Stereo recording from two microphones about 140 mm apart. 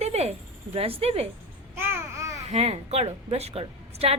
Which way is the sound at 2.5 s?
45° right (ahead or behind).